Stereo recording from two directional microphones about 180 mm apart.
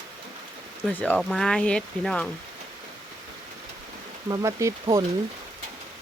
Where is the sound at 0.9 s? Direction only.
10° left (ahead or behind).